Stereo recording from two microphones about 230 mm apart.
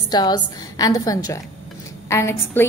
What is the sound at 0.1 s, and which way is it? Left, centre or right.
A woman's voice, centre.